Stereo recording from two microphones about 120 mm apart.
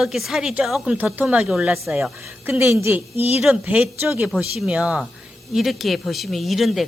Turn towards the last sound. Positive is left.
turn(degrees=0)  # may be behind; listen again after turning